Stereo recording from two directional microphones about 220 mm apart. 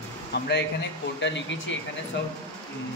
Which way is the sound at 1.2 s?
55° left (ahead or behind).